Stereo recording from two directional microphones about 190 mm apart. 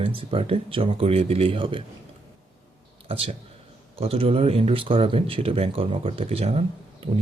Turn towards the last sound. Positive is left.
turn(degrees=-30)  # may be behind; listen again after turning